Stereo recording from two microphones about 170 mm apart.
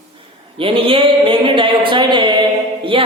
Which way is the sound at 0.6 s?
30° right (ahead or behind).